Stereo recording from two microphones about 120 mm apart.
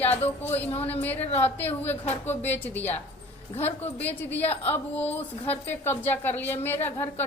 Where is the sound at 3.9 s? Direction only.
15° left (ahead or behind).